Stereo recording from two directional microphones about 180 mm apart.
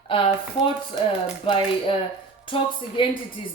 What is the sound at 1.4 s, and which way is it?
Speech, 30° left (ahead or behind).